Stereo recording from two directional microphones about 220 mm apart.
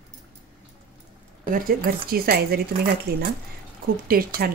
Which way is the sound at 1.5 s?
40° right (ahead or behind).